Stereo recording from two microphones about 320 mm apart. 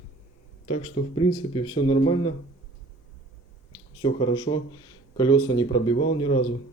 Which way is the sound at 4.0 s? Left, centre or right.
Centre.